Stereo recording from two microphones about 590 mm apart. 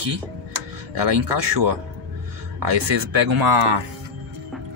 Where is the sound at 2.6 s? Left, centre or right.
Right.